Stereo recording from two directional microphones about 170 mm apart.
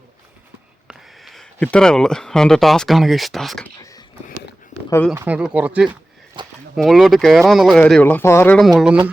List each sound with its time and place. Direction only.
0.9 s speech: centre (ahead or behind)
3.8 s a sound: 20° left (ahead or behind)
5.1 s speech: 10° right (ahead or behind)
6.4 s a sound: 25° right (ahead or behind)
6.7 s speech: centre (ahead or behind)
8.5 s speech: centre (ahead or behind)